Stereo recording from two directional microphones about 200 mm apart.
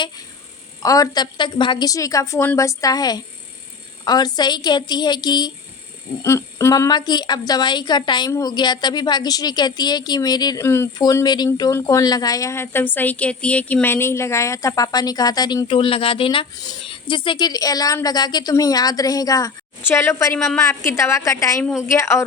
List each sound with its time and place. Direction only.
0.8 s a woman's voice: 15° left (ahead or behind)